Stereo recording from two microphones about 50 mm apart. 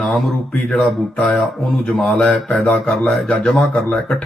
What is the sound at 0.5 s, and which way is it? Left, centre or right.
Speech, left.